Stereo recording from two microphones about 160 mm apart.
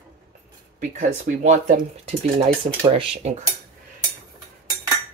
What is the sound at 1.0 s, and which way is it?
Speech, 50° right (ahead or behind).